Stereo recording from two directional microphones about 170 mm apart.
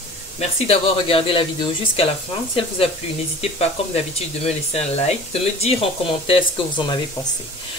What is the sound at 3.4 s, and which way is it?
Speech, 40° left (ahead or behind).